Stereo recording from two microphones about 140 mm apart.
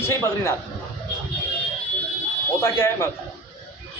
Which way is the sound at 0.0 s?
20° left (ahead or behind).